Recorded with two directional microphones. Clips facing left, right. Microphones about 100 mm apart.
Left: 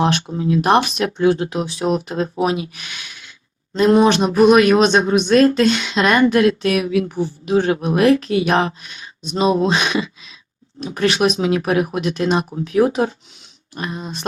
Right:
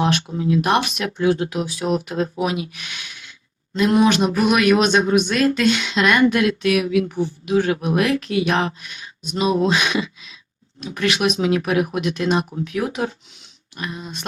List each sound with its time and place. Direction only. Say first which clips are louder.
0.0 s speech: left 2 dB; 35° left (ahead or behind)